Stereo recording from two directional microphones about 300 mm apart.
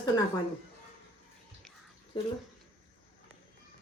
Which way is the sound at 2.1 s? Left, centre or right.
Centre.